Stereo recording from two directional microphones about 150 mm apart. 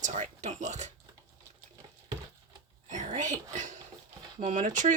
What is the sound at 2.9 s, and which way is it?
Speech, 55° right (ahead or behind).